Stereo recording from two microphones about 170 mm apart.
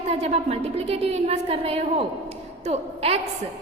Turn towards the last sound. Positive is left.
turn(degrees=-35)  # may be behind; listen again after turning